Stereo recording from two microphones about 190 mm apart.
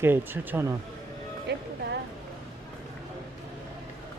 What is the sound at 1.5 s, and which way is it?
Speech, 60° right (ahead or behind).